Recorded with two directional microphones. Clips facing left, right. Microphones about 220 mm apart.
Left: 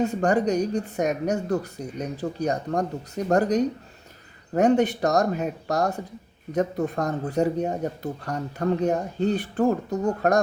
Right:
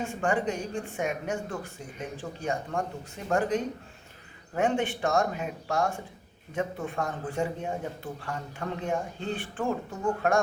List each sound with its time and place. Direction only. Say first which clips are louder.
0.0 s speech: left 6 dB; 40° left (ahead or behind)